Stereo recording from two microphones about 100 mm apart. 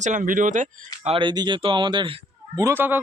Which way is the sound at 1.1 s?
55° right (ahead or behind).